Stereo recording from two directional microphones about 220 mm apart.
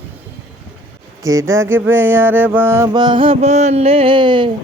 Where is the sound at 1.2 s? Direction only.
15° right (ahead or behind).